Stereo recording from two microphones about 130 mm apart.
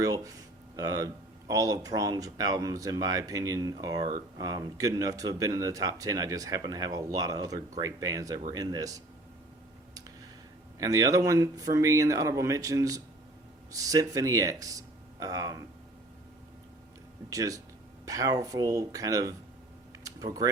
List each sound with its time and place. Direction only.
0.0 s speech: 25° right (ahead or behind)
10.8 s speech: 25° right (ahead or behind)
17.2 s speech: 25° right (ahead or behind)
20.1 s a sound: 30° right (ahead or behind)